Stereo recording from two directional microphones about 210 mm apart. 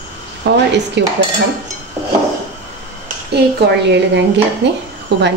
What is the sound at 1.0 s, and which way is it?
Speech, 55° right (ahead or behind).